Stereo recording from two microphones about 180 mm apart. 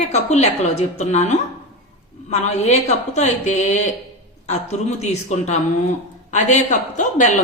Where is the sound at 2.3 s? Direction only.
40° left (ahead or behind).